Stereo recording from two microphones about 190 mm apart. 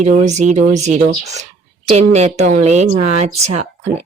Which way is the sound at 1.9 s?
35° right (ahead or behind).